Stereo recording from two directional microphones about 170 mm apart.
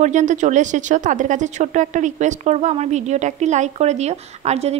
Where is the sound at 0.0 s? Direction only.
45° right (ahead or behind).